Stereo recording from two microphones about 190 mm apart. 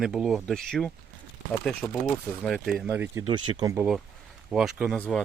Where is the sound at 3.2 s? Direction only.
25° right (ahead or behind).